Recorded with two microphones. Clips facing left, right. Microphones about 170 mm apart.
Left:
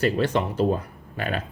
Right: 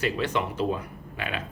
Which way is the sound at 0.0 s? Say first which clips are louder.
Left 5 dB; 35° left (ahead or behind).